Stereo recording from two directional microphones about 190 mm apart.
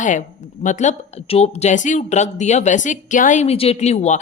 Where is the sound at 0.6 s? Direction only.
40° left (ahead or behind).